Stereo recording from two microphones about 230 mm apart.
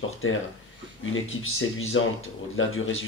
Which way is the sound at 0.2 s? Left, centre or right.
Left.